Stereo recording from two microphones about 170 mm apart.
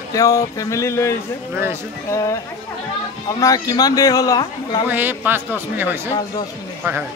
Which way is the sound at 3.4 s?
20° left (ahead or behind).